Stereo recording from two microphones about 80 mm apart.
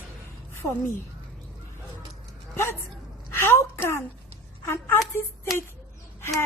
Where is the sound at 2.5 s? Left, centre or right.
Left.